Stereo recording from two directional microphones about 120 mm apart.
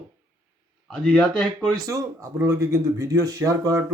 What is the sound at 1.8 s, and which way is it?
Speech, 25° right (ahead or behind).